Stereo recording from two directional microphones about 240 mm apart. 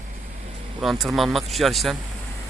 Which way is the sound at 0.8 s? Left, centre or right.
Centre.